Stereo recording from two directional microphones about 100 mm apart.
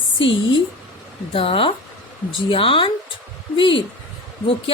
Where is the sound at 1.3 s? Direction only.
65° left (ahead or behind).